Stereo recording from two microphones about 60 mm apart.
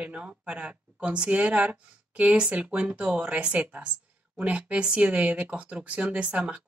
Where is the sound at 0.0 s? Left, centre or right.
Right.